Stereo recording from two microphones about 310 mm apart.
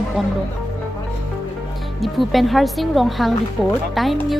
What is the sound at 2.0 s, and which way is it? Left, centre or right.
Speech, centre.